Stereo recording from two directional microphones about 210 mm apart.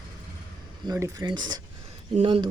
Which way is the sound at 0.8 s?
15° right (ahead or behind).